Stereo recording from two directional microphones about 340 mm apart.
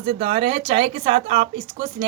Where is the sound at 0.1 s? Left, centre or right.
Centre.